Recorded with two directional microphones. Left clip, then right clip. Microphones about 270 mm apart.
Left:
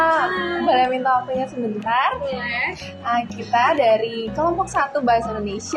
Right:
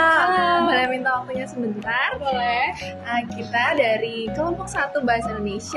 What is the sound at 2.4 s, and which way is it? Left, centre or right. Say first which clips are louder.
Speech: right 3 dB; right.